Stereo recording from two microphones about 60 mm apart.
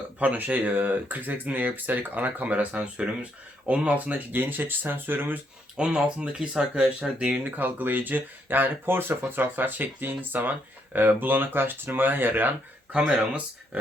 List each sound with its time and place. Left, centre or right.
0.2 s speech: right
5.7 s speech: centre
7.4 s speech: right
12.9 s speech: right